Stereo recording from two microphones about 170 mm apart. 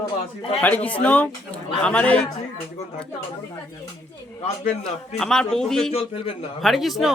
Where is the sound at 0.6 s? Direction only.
10° left (ahead or behind).